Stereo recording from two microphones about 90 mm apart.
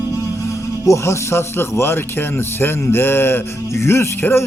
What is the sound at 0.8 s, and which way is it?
Speech, 35° left (ahead or behind).